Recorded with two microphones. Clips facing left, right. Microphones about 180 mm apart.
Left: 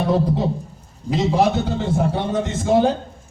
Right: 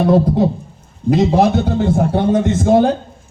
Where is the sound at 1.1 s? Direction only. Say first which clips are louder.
Right 5 dB; 50° right (ahead or behind).